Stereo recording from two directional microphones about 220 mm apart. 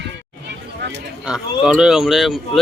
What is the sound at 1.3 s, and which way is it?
Speech, centre (ahead or behind).